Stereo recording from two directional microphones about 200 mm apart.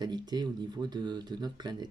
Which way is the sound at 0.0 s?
20° right (ahead or behind).